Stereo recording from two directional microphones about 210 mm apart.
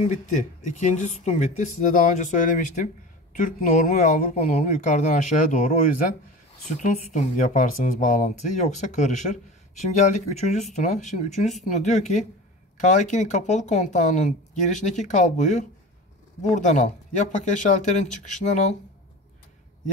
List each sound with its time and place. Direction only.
0.0 s speech: 30° left (ahead or behind)